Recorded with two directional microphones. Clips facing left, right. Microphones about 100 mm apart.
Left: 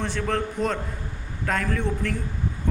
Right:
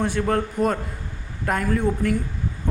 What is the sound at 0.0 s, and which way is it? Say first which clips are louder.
A man's voice: right 4 dB; 10° right (ahead or behind).